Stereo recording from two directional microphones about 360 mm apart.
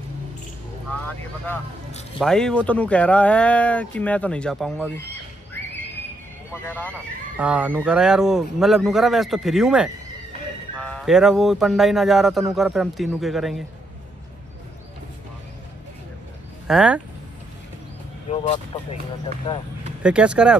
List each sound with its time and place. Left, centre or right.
0.9 s speech: centre
6.5 s speech: centre
16.6 s speech: centre
18.3 s speech: centre
20.0 s speech: centre